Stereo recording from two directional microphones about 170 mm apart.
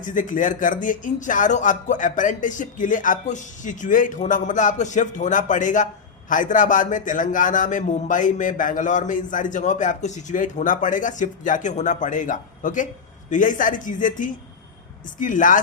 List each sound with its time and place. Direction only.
0.0 s speech: 50° left (ahead or behind)